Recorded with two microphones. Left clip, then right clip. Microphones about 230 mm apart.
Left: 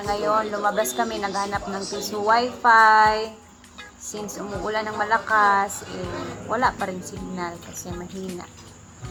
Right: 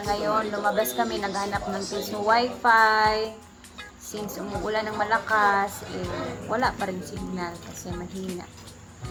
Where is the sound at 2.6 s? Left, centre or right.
Centre.